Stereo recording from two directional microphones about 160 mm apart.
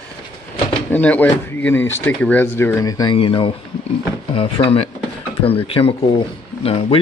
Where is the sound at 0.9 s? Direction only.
10° left (ahead or behind).